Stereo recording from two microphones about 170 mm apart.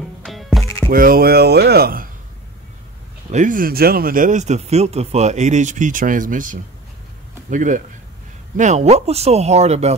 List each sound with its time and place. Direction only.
0.2 s music: centre (ahead or behind)
0.9 s speech: 60° right (ahead or behind)
3.3 s a man's voice: 45° right (ahead or behind)